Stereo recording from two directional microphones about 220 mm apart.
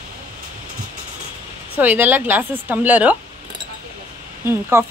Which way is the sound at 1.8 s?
10° right (ahead or behind).